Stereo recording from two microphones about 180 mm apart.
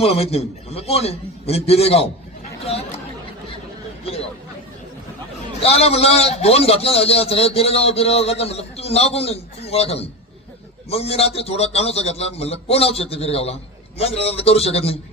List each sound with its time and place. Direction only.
0.0 s a man's voice: 35° left (ahead or behind)
4.0 s hubbub: 35° left (ahead or behind)
5.6 s a man's voice: 35° left (ahead or behind)